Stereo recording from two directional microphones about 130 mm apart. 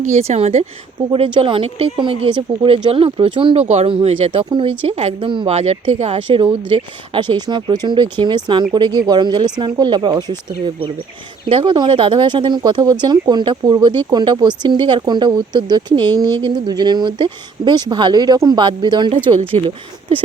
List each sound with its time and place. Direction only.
0.0 s a woman's voice: 55° right (ahead or behind)
1.1 s speech: 45° right (ahead or behind)
3.7 s speech: 55° right (ahead or behind)
5.3 s speech: 40° right (ahead or behind)
5.5 s speech: 50° right (ahead or behind); by 10.3 s 30° right (ahead or behind)
11.4 s speech: 40° right (ahead or behind)